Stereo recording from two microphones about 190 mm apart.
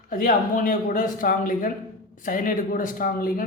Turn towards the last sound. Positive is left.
turn(degrees=50)  # may be behind; listen again after turning